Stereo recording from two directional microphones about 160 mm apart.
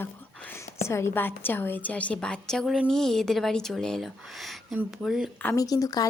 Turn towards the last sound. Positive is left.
turn(degrees=25)  # may be behind; listen again after turning